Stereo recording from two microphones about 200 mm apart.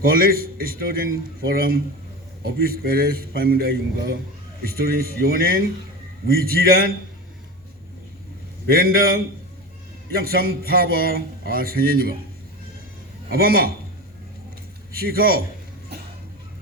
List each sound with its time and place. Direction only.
0.0 s a man's voice: 45° right (ahead or behind)
8.6 s a man's voice: 45° right (ahead or behind)
13.3 s a man's voice: 45° right (ahead or behind)
14.9 s a man's voice: 45° right (ahead or behind)